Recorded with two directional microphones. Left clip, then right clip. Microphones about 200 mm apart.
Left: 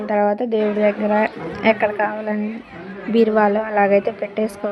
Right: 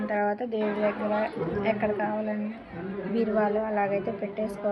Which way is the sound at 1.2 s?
70° left (ahead or behind).